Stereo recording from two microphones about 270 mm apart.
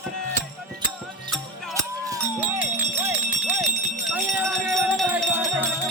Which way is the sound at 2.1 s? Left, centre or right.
Centre.